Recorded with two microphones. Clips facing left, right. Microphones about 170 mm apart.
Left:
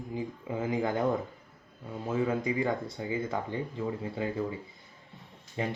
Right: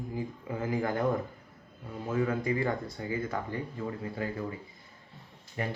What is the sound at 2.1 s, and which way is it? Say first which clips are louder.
Speech: even; 20° left (ahead or behind).